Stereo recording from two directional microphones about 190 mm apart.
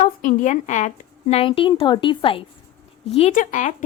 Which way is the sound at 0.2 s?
45° left (ahead or behind).